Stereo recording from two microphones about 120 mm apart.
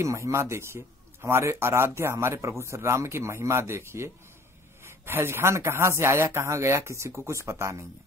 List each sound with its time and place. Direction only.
0.0 s speech: 25° right (ahead or behind)